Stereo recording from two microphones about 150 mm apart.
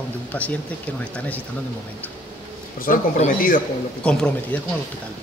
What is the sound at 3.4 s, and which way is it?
Speech, 65° left (ahead or behind).